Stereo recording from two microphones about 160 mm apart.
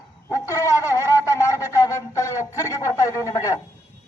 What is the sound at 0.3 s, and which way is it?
Wind instrument, 20° left (ahead or behind).